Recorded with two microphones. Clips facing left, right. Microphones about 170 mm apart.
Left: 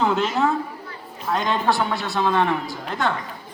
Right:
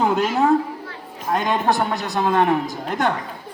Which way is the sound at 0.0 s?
15° right (ahead or behind).